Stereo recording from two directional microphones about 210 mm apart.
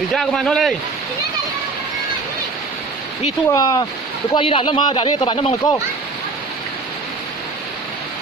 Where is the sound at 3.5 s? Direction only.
15° left (ahead or behind).